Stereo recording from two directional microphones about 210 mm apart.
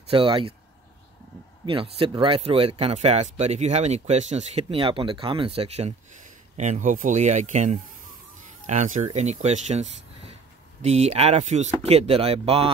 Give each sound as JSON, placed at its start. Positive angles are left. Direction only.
{"t": 0.1, "sound": "speech", "side_deg": -25}
{"t": 1.7, "sound": "speech", "side_deg": -25}